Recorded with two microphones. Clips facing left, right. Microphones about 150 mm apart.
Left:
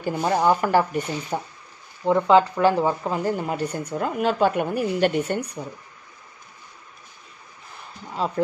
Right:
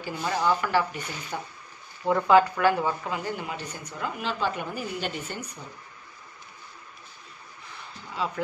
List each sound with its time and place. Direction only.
0.0 s speech: 45° left (ahead or behind)
1.3 s speech: 35° left (ahead or behind)
2.0 s a woman's voice: 20° left (ahead or behind); by 5.6 s 65° left (ahead or behind)
8.2 s speech: 40° left (ahead or behind)